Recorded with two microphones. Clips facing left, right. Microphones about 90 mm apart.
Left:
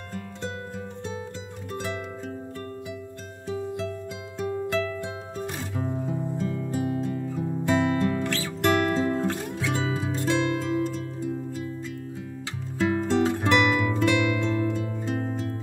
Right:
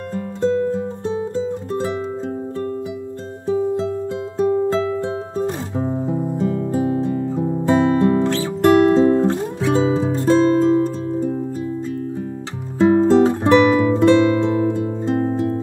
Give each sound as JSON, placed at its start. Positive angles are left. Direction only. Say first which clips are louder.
{"t": 0.4, "sound": "music", "louder": "right 18 dB", "side_deg": -25}
{"t": 3.4, "sound": "music", "louder": "right 11 dB", "side_deg": -25}
{"t": 12.7, "sound": "music", "louder": "right 11 dB", "side_deg": -25}